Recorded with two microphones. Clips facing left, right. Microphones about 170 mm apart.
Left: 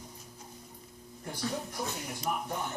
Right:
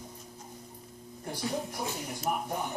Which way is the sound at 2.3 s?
50° right (ahead or behind).